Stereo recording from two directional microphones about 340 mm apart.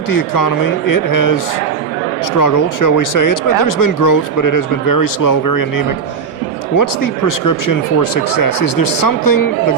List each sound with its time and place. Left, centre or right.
0.1 s speech: left
2.4 s speech: left